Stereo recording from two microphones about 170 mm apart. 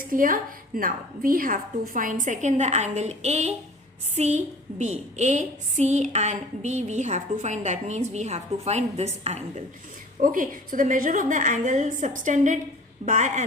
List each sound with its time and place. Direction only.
0.0 s a woman's voice: 55° right (ahead or behind); by 9.4 s 40° right (ahead or behind)
10.2 s a woman's voice: 50° right (ahead or behind)